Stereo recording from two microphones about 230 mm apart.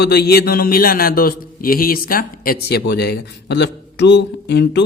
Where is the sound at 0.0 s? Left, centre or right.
Left.